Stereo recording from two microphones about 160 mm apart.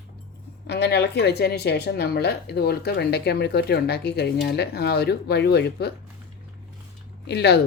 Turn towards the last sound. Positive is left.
turn(degrees=90)